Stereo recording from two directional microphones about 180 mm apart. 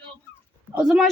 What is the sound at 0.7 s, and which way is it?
Speech, centre (ahead or behind).